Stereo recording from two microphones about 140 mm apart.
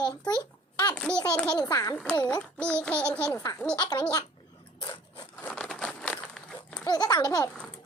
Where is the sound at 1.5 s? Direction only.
30° left (ahead or behind).